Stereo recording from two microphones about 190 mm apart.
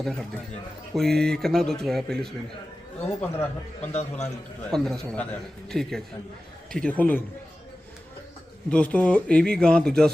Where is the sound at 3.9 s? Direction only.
35° left (ahead or behind).